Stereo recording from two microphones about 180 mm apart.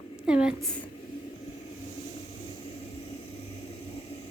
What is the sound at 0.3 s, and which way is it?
Speech, 5° right (ahead or behind).